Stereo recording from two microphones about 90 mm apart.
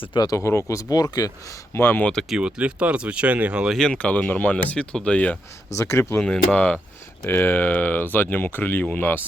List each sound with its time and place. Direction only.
0.3 s speech: 35° left (ahead or behind)
1.7 s speech: 25° left (ahead or behind)
2.3 s speech: 10° right (ahead or behind)
3.8 s speech: 10° left (ahead or behind)
5.7 s speech: 30° left (ahead or behind)
6.1 s speech: 10° left (ahead or behind)